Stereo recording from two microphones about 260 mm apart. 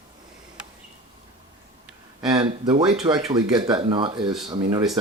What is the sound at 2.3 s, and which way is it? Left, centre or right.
Speech, centre.